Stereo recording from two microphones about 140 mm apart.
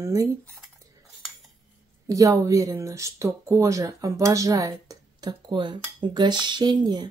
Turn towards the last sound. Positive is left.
turn(degrees=-30)  # may be behind; listen again after turning